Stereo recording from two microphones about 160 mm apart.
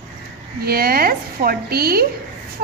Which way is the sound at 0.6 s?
70° right (ahead or behind).